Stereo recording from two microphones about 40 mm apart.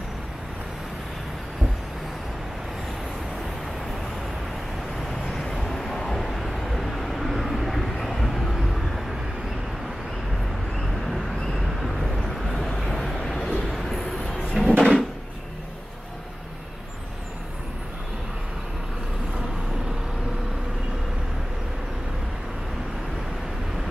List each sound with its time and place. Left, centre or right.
5.3 s vehicle: centre
10.8 s vehicle: centre
13.7 s a sound: centre
14.3 s drawer open or close: centre